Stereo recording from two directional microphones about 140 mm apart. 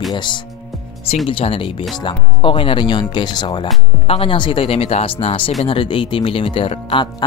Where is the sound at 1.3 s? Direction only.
40° left (ahead or behind).